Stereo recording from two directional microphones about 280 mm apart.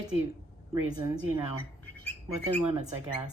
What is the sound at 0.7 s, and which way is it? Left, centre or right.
Speech, centre.